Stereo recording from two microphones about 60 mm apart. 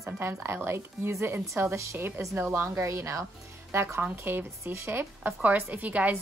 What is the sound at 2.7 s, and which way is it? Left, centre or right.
Speech, right.